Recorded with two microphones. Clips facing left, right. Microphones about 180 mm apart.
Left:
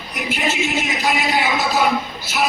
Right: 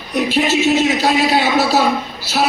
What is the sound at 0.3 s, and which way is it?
A man's voice, 75° right (ahead or behind).